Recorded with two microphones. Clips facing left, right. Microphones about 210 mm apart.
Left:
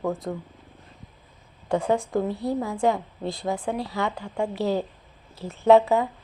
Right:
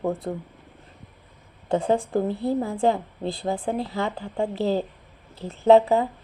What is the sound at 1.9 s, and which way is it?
A woman's voice, 30° right (ahead or behind).